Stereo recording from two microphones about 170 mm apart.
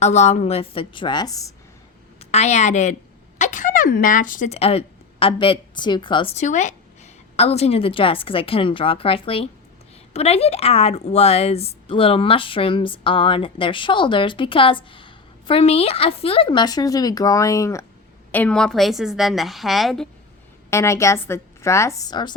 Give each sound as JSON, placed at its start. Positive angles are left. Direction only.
{"t": 0.0, "sound": "a woman's voice", "side_deg": 40}
{"t": 2.3, "sound": "a woman's voice", "side_deg": 40}
{"t": 6.3, "sound": "a woman's voice", "side_deg": 45}
{"t": 20.7, "sound": "a woman's voice", "side_deg": 15}